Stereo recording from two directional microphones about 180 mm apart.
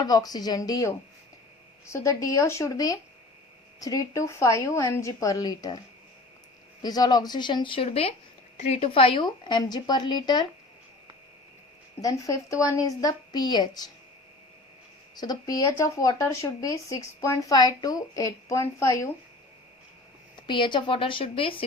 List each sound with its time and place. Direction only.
0.0 s a woman's voice: 20° left (ahead or behind)
6.8 s speech: 20° left (ahead or behind)
12.0 s speech: 20° left (ahead or behind)
15.1 s speech: 20° left (ahead or behind)
20.3 s speech: 25° left (ahead or behind)